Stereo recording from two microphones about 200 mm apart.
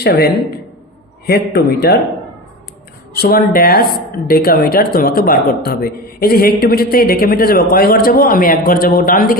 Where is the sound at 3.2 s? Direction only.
50° left (ahead or behind).